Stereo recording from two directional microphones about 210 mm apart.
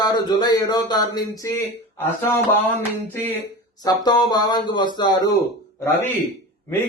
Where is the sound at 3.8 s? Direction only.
20° left (ahead or behind).